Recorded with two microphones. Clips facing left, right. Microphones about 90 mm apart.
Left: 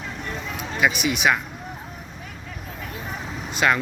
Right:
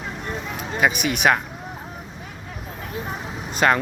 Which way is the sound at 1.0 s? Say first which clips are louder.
Right 2 dB; 50° right (ahead or behind).